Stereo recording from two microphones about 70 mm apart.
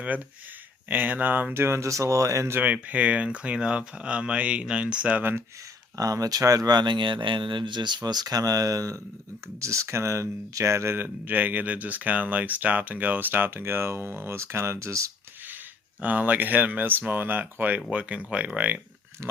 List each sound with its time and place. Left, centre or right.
0.9 s speech: right
2.5 s speech: right
6.0 s speech: right
7.7 s speech: right
10.9 s speech: right
16.0 s speech: right